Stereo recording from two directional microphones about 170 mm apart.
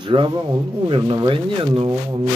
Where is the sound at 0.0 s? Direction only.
30° right (ahead or behind).